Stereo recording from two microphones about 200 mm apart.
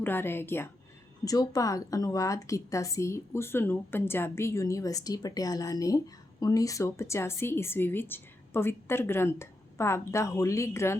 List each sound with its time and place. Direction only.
0.0 s a woman's voice: 10° left (ahead or behind)